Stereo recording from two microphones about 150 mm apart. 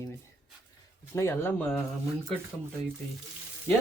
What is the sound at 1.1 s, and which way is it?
Speech, 15° left (ahead or behind).